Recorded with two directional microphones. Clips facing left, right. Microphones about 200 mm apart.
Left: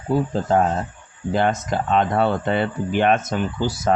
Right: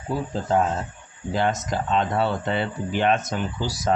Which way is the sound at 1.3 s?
55° left (ahead or behind).